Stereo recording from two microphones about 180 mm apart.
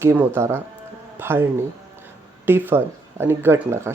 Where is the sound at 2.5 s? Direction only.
10° right (ahead or behind).